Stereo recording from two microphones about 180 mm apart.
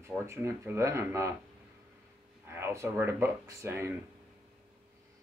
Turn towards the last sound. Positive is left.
turn(degrees=-15)  # may be behind; listen again after turning